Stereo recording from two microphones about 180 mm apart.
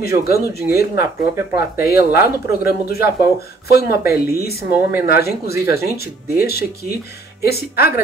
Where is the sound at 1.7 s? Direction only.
60° left (ahead or behind).